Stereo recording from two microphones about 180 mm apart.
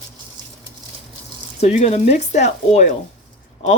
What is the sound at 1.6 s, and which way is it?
Speech, 40° left (ahead or behind).